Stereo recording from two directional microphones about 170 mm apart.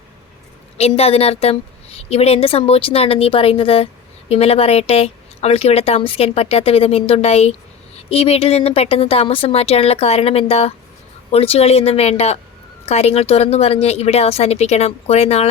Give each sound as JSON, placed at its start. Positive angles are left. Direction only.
{"t": 0.8, "sound": "a woman's voice", "side_deg": 40}